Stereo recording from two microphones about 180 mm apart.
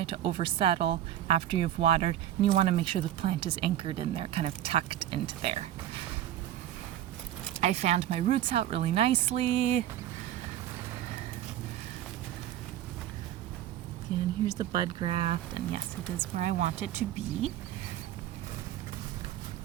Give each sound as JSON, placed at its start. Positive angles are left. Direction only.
{"t": 0.0, "sound": "speech", "side_deg": -30}
{"t": 7.6, "sound": "speech", "side_deg": -40}
{"t": 14.4, "sound": "speech", "side_deg": -20}